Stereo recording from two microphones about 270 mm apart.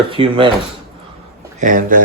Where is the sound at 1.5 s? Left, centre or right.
Right.